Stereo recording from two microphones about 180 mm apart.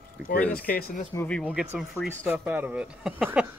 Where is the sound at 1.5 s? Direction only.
5° right (ahead or behind).